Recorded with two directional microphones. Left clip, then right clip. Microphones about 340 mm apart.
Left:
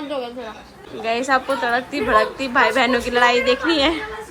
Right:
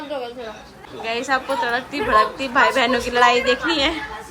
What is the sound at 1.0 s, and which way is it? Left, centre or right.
A woman's voice, centre.